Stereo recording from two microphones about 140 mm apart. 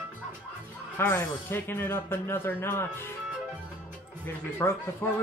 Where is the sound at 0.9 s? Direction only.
15° left (ahead or behind).